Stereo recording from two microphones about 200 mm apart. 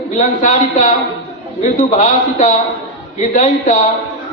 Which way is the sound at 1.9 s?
40° left (ahead or behind).